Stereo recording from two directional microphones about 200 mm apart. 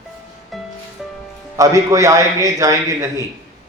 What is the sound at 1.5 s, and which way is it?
A man's voice, 15° right (ahead or behind).